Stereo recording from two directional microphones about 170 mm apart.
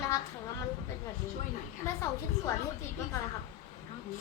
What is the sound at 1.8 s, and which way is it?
Speech, 15° left (ahead or behind).